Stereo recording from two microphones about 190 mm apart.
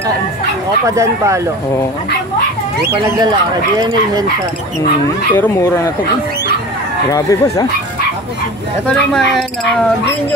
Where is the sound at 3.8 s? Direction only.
20° right (ahead or behind).